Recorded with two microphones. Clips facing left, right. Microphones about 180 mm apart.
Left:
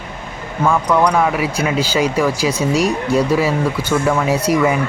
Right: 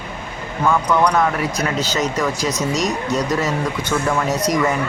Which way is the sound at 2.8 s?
30° left (ahead or behind).